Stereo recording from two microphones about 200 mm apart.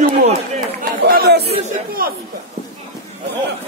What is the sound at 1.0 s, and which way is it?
Chatter, 50° right (ahead or behind).